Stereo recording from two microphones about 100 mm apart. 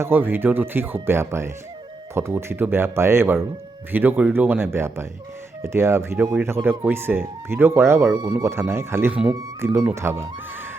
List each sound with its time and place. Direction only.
0.0 s speech: 20° right (ahead or behind)